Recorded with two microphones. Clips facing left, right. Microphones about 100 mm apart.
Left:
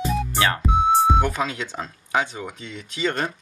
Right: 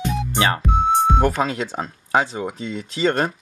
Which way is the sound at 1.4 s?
35° right (ahead or behind).